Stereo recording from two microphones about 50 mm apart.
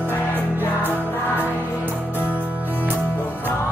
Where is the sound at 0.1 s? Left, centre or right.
Left.